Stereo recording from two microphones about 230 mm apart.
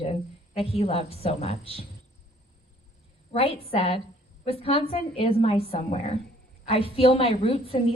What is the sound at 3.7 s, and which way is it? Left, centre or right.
A woman's voice, left.